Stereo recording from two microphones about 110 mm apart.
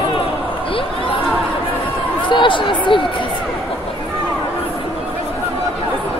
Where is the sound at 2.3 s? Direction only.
50° left (ahead or behind).